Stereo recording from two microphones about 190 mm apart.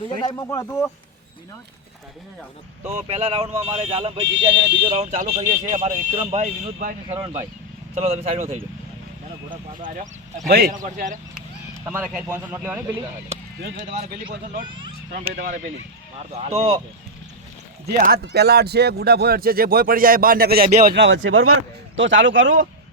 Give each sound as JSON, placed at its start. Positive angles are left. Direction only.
{"t": 0.2, "sound": "speech", "side_deg": 20}
{"t": 2.8, "sound": "speech", "side_deg": -35}
{"t": 7.9, "sound": "speech", "side_deg": -35}
{"t": 9.5, "sound": "speech", "side_deg": -45}
{"t": 11.9, "sound": "speech", "side_deg": -5}
{"t": 15.3, "sound": "speech", "side_deg": -45}
{"t": 17.8, "sound": "speech", "side_deg": -50}
{"t": 20.7, "sound": "speech", "side_deg": -40}
{"t": 20.9, "sound": "speech", "side_deg": -70}
{"t": 21.2, "sound": "speech", "side_deg": -90}
{"t": 21.9, "sound": "speech", "side_deg": -80}